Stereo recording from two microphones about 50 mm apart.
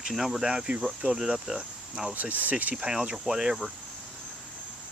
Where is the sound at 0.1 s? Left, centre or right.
Centre.